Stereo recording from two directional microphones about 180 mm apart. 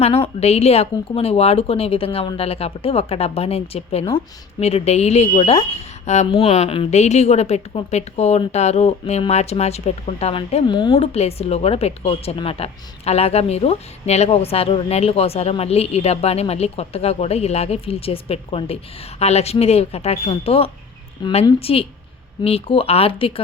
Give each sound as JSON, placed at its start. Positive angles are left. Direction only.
{"t": 0.0, "sound": "a woman's voice", "side_deg": 35}
{"t": 11.1, "sound": "a woman's voice", "side_deg": 35}